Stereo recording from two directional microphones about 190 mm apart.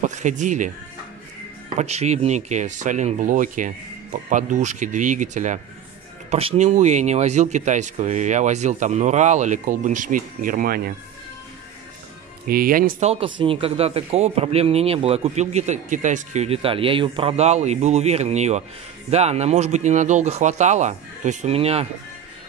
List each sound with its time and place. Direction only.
0.0 s speech: 40° right (ahead or behind)
1.8 s speech: 35° right (ahead or behind); by 10.9 s 50° right (ahead or behind)
12.4 s speech: 50° right (ahead or behind)
13.1 s speech: 30° right (ahead or behind)